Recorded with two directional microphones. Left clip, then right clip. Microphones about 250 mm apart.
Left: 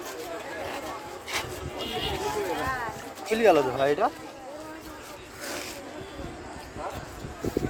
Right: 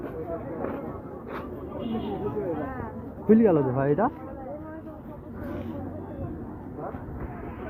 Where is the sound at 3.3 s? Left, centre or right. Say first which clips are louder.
Left 1 dB; left.